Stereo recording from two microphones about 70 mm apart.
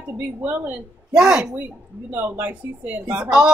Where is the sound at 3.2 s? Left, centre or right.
Centre.